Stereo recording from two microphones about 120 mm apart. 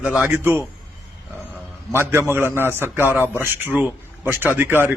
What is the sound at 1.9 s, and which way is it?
A man's voice, 20° right (ahead or behind).